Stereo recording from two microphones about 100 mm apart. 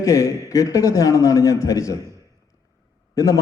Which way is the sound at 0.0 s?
30° left (ahead or behind).